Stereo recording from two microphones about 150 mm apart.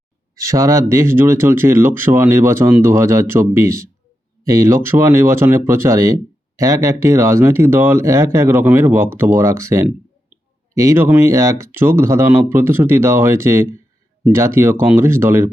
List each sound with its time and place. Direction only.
0.3 s speech: 20° right (ahead or behind)